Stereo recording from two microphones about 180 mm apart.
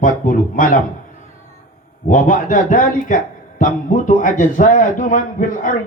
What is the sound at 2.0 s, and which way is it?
A man's voice, 45° left (ahead or behind).